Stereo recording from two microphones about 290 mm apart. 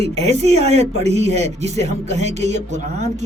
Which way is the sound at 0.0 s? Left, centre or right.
Right.